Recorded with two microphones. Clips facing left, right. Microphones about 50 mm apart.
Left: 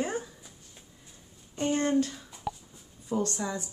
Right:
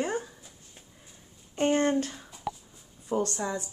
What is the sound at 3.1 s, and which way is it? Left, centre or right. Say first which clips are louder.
Speech: right 2 dB; right.